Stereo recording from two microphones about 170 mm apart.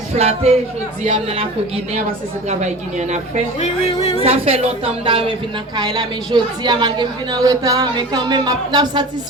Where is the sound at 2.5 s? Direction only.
45° right (ahead or behind).